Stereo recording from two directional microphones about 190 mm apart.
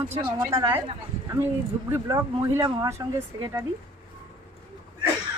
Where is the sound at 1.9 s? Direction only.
15° right (ahead or behind).